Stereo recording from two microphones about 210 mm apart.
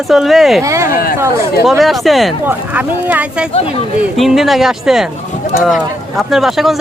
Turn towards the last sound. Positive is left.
turn(degrees=0)  # may be behind; listen again after turning